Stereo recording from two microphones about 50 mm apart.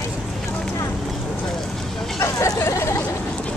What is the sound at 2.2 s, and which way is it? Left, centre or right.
Hubbub, left.